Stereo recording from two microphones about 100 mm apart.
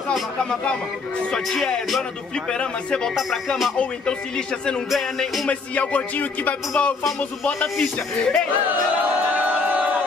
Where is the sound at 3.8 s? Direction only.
10° left (ahead or behind).